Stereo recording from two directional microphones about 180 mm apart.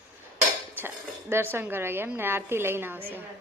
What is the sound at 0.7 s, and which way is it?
Speech, 10° right (ahead or behind).